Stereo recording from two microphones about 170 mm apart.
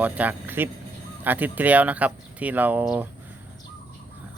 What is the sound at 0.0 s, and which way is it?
Speech, 10° right (ahead or behind).